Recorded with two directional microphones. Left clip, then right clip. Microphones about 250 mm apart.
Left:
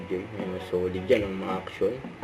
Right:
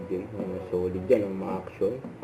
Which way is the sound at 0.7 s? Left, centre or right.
Left.